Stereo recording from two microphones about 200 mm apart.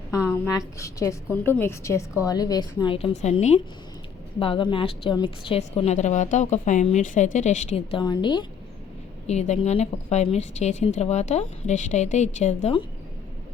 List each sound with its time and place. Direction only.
0.4 s a woman's voice: 15° left (ahead or behind)
9.2 s a woman's voice: 35° left (ahead or behind)